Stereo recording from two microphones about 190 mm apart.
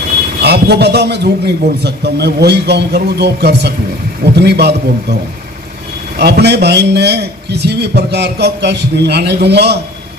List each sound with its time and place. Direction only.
0.4 s a man's voice: 60° right (ahead or behind)
6.1 s a man's voice: 60° right (ahead or behind)